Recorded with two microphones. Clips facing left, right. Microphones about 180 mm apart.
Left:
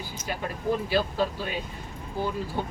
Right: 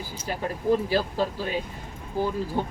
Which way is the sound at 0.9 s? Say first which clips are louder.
Right 1 dB; 40° right (ahead or behind).